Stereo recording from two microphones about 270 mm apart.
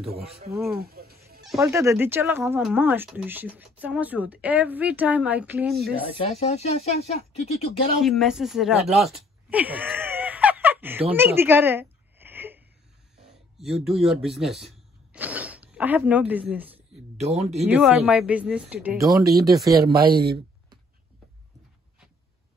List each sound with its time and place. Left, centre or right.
0.7 s a sound: right
1.6 s speech: centre
6.1 s speech: left
8.0 s speech: centre
8.9 s groan: centre
13.8 s speech: centre
17.2 s speech: right
17.6 s speech: centre